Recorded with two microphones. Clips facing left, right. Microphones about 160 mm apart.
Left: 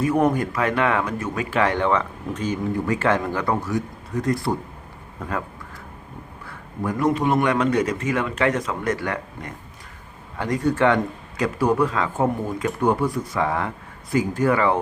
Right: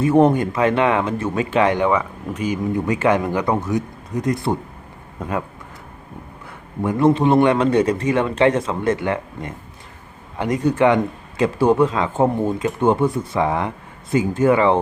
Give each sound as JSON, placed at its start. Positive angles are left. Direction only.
{"t": 0.0, "sound": "speech", "side_deg": -25}
{"t": 6.8, "sound": "speech", "side_deg": -25}